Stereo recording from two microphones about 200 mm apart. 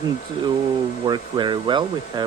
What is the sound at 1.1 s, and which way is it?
Speech, 20° right (ahead or behind).